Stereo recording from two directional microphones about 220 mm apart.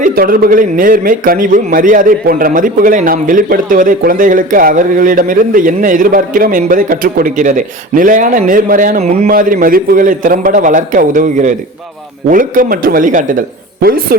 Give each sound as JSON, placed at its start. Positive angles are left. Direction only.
{"t": 0.0, "sound": "a man's voice", "side_deg": -40}